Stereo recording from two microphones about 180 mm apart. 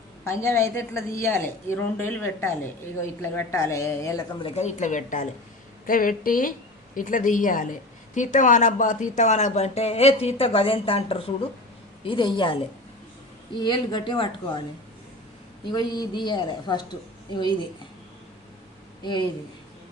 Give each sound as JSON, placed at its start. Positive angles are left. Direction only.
{"t": 0.3, "sound": "a woman's voice", "side_deg": 15}
{"t": 4.4, "sound": "a woman's voice", "side_deg": 40}
{"t": 13.6, "sound": "a man's voice", "side_deg": 25}
{"t": 15.7, "sound": "a man's voice", "side_deg": 25}